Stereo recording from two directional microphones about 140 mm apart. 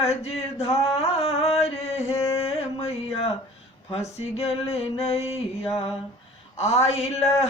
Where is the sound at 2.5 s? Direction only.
45° left (ahead or behind).